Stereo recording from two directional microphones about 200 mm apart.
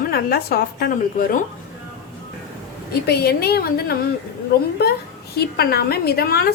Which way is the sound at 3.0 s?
50° left (ahead or behind).